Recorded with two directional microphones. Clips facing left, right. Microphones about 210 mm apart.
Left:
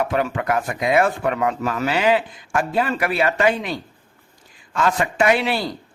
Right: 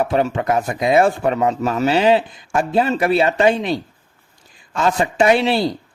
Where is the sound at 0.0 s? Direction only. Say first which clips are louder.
Right 3 dB; 25° right (ahead or behind).